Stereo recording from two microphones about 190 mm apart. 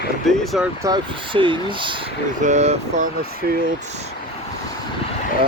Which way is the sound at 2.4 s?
40° right (ahead or behind).